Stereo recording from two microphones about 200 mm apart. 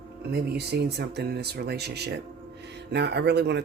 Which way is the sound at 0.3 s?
55° right (ahead or behind).